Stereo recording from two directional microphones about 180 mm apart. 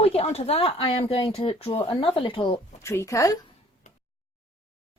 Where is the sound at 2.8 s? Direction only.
15° left (ahead or behind).